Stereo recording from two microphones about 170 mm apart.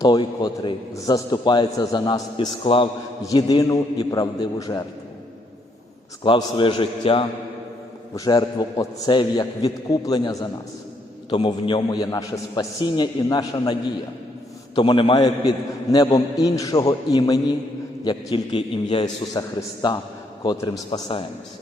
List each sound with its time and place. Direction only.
0.0 s a man's voice: 25° left (ahead or behind)
6.2 s a man's voice: 30° left (ahead or behind)
14.8 s a man's voice: 25° left (ahead or behind)